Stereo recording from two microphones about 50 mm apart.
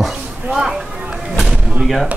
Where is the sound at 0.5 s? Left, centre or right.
Centre.